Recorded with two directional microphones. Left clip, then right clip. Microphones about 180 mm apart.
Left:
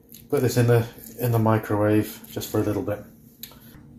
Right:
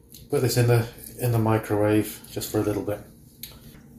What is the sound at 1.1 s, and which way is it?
Speech, 35° left (ahead or behind).